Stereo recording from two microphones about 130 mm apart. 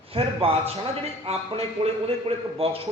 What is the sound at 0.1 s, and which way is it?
A man's voice, 45° right (ahead or behind).